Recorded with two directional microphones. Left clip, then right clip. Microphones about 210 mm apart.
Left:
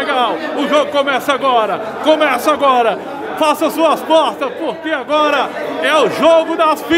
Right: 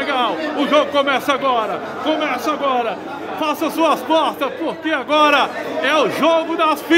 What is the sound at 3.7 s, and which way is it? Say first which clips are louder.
A man's voice: left 4 dB; 5° left (ahead or behind).